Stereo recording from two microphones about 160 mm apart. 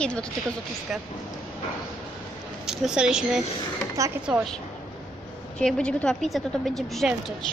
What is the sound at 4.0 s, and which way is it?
Speech, 20° right (ahead or behind).